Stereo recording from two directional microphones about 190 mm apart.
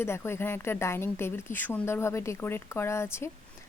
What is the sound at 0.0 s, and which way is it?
Speech, 15° left (ahead or behind).